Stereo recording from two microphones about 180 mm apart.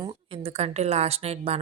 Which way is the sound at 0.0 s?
35° right (ahead or behind).